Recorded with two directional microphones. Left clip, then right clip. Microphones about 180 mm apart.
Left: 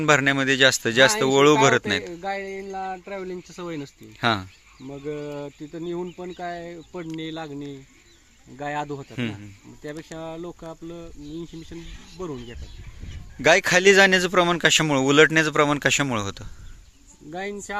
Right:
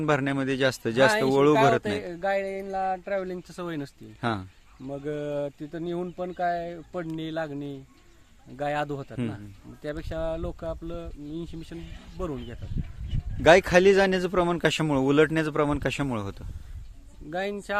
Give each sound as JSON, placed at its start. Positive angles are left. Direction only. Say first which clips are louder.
{"t": 0.0, "sound": "speech", "louder": "left 7 dB", "side_deg": 5}
{"t": 2.2, "sound": "speech", "louder": "right 2 dB", "side_deg": -25}
{"t": 4.2, "sound": "speech", "louder": "left 7 dB", "side_deg": 5}
{"t": 4.9, "sound": "speech", "louder": "right 1 dB", "side_deg": -25}
{"t": 7.1, "sound": "speech", "louder": "even", "side_deg": -10}
{"t": 9.1, "sound": "speech", "louder": "left 3 dB", "side_deg": 0}
{"t": 9.8, "sound": "speech", "louder": "right 3 dB", "side_deg": -20}
{"t": 13.4, "sound": "speech", "louder": "left 1 dB", "side_deg": 0}
{"t": 17.2, "sound": "speech", "louder": "right 1 dB", "side_deg": -15}